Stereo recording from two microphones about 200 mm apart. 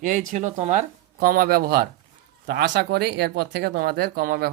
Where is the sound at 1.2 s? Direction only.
45° right (ahead or behind).